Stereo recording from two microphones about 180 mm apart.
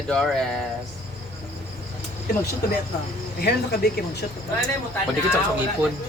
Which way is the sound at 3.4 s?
60° left (ahead or behind).